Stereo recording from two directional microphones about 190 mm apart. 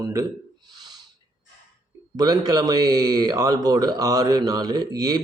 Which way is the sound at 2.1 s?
20° right (ahead or behind).